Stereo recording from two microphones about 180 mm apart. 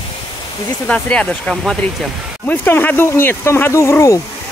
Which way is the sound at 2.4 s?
10° left (ahead or behind).